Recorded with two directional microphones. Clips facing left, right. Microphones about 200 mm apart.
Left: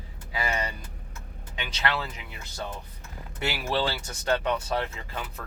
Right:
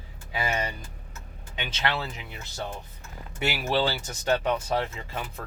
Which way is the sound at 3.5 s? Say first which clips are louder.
Right 2 dB; 10° right (ahead or behind).